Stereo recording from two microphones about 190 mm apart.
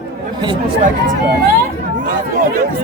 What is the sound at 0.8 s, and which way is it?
Speech, 45° right (ahead or behind).